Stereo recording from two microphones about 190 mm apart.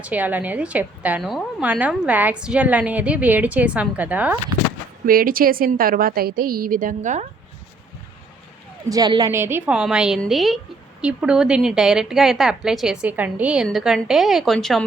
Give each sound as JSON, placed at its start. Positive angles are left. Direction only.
{"t": 0.0, "sound": "a woman's voice", "side_deg": -10}
{"t": 5.0, "sound": "a woman's voice", "side_deg": -50}
{"t": 8.9, "sound": "a woman's voice", "side_deg": -20}